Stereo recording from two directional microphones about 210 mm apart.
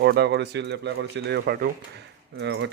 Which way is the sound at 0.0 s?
50° right (ahead or behind).